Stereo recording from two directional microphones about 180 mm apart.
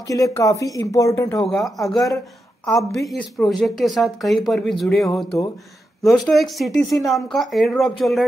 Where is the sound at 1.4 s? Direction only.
Centre (ahead or behind).